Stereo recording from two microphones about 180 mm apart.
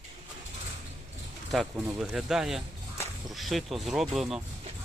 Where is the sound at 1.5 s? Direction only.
Centre (ahead or behind).